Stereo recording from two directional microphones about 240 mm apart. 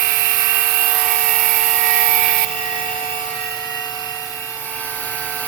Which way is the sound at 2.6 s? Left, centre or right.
Left.